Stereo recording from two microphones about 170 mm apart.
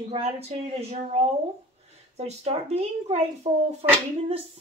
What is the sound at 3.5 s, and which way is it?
Speech, 25° right (ahead or behind).